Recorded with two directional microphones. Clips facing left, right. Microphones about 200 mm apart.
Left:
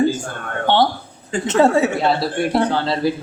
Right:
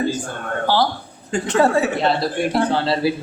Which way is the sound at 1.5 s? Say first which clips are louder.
Left 2 dB; 25° left (ahead or behind).